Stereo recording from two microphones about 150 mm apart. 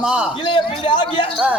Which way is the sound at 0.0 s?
5° right (ahead or behind).